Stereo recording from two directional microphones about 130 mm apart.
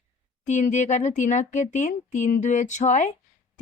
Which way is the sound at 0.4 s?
65° left (ahead or behind).